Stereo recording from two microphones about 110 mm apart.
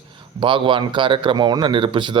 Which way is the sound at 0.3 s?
50° right (ahead or behind).